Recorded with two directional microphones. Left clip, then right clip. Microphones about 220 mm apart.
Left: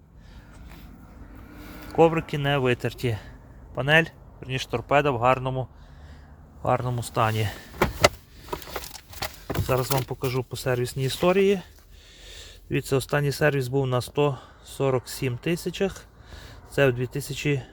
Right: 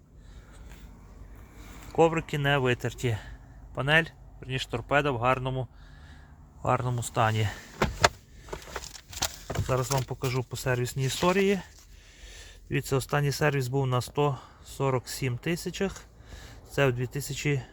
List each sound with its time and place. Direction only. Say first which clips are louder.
1.9 s speech: left 4 dB; centre (ahead or behind)
9.6 s speech: left 4 dB; centre (ahead or behind)